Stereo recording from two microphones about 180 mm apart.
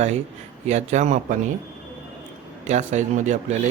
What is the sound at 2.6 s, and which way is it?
Speech, 40° right (ahead or behind).